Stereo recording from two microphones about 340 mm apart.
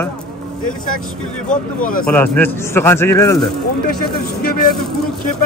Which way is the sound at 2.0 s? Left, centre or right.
Centre.